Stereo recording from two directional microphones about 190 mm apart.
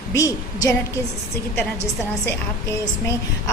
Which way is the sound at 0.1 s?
15° left (ahead or behind).